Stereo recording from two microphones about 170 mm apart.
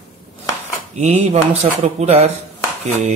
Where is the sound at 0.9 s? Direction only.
40° right (ahead or behind).